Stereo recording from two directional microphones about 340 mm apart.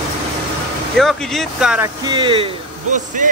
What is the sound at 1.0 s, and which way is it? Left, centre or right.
Speech, centre.